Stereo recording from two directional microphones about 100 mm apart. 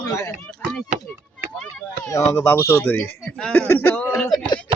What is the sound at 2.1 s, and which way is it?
Speech, 30° left (ahead or behind).